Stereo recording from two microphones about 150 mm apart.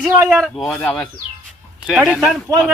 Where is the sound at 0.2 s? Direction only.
20° right (ahead or behind).